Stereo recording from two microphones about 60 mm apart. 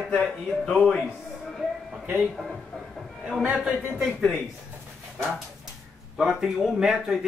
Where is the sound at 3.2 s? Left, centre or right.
Right.